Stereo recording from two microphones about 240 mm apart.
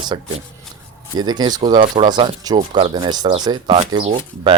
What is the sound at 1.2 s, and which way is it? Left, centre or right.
Speech, centre.